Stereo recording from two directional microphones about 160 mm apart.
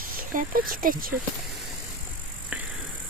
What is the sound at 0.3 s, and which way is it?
Speech, 60° right (ahead or behind).